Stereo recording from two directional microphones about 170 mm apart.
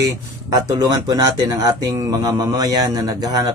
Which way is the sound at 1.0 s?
25° right (ahead or behind).